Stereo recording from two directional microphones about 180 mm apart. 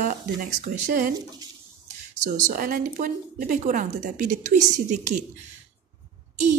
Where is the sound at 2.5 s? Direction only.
50° right (ahead or behind).